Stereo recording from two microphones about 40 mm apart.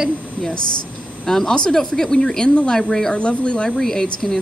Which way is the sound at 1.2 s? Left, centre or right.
Centre.